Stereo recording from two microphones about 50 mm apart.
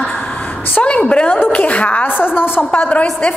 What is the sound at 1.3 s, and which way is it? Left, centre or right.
Speech, left.